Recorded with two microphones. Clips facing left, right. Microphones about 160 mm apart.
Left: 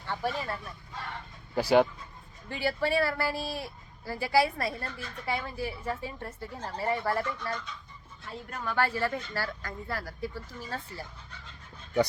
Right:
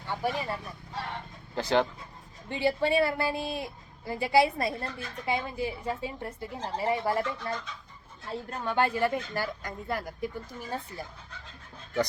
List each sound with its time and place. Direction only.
0.1 s speech: 15° right (ahead or behind)
1.5 s speech: 10° left (ahead or behind)
2.5 s speech: 20° right (ahead or behind)
8.3 s speech: 30° right (ahead or behind)